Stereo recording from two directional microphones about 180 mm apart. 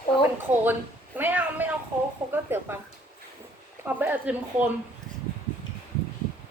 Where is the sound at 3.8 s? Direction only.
10° right (ahead or behind).